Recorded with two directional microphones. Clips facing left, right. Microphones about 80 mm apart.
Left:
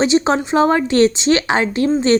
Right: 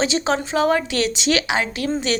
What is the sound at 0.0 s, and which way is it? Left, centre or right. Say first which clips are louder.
Speech: left 6 dB; left.